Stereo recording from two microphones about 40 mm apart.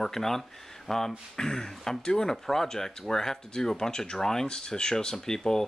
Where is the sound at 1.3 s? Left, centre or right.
Centre.